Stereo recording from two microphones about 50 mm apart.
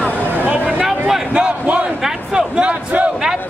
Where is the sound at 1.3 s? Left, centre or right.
Right.